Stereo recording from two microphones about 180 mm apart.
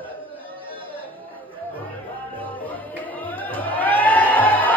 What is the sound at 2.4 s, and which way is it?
Music, 10° left (ahead or behind).